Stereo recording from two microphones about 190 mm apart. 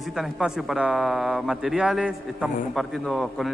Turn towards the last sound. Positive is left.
turn(degrees=0)  # may be behind; listen again after turning